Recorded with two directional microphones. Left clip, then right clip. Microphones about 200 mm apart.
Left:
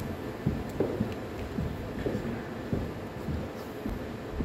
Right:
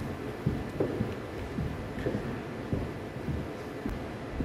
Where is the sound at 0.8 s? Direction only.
40° left (ahead or behind).